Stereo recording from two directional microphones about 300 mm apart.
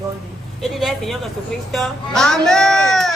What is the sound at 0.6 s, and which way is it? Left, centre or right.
Speech, centre.